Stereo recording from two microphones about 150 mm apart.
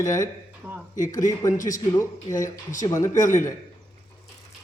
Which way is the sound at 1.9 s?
25° left (ahead or behind).